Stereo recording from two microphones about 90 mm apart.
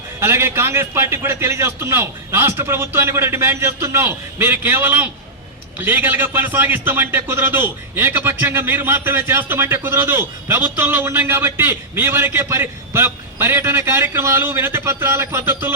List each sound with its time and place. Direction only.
0.2 s a man's voice: 30° right (ahead or behind)